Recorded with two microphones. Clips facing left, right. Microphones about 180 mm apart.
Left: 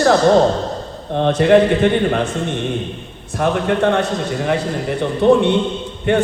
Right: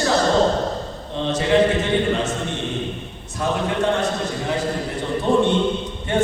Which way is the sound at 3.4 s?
65° left (ahead or behind).